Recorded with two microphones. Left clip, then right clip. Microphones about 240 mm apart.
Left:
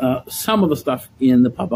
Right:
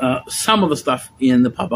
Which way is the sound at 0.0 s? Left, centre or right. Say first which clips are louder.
Right 2 dB; centre.